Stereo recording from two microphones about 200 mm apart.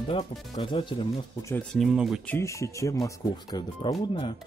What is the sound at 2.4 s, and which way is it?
Speech, 15° left (ahead or behind).